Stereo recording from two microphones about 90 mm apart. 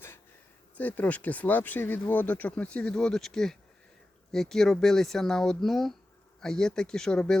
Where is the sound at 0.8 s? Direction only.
20° left (ahead or behind).